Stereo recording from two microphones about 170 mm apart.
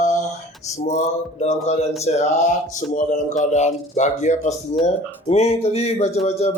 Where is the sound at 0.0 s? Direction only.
45° left (ahead or behind).